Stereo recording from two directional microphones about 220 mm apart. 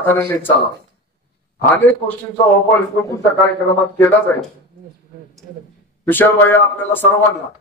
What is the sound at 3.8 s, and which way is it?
Speech, 10° left (ahead or behind).